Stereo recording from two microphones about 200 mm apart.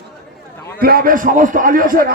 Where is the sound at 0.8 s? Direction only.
45° right (ahead or behind).